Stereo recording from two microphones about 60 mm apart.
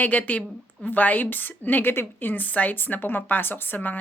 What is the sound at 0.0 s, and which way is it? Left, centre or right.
A woman's voice, left.